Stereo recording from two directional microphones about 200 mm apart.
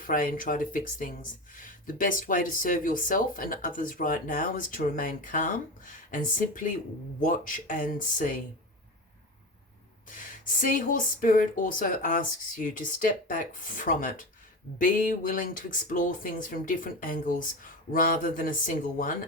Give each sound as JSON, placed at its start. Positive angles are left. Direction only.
{"t": 0.0, "sound": "speech", "side_deg": 45}
{"t": 10.1, "sound": "speech", "side_deg": 40}